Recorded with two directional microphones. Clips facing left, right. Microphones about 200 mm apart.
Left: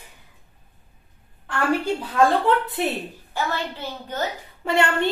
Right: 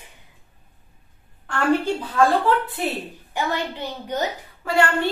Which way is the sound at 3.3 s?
15° right (ahead or behind).